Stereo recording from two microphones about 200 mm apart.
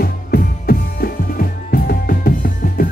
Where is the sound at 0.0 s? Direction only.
50° left (ahead or behind).